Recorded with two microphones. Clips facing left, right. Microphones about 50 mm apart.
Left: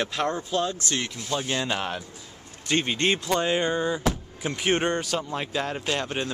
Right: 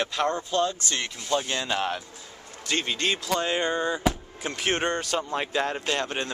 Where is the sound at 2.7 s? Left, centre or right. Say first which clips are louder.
Left 3 dB; centre.